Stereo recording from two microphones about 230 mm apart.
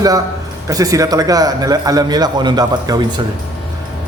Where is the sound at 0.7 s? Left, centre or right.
Centre.